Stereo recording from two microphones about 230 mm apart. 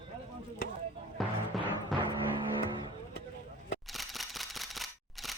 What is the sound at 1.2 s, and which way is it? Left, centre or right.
Music, centre.